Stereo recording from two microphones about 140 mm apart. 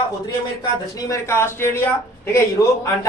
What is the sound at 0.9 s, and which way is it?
Speech, 20° left (ahead or behind).